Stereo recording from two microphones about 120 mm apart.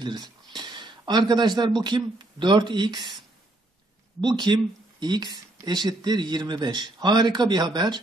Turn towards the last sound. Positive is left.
turn(degrees=-35)  # may be behind; listen again after turning